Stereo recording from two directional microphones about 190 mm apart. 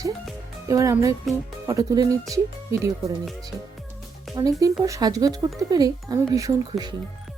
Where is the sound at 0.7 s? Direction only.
15° right (ahead or behind).